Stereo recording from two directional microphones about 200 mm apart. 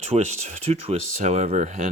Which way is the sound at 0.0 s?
35° right (ahead or behind).